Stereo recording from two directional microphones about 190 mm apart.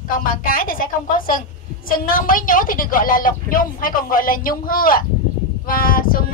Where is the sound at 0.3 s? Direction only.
50° left (ahead or behind).